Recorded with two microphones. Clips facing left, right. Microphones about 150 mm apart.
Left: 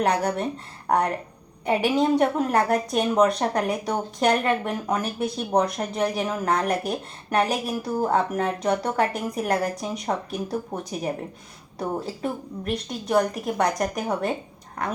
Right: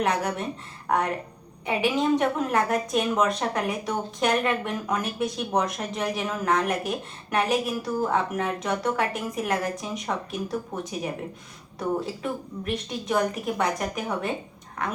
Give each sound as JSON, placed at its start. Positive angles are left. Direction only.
{"t": 0.0, "sound": "a woman's voice", "side_deg": 35}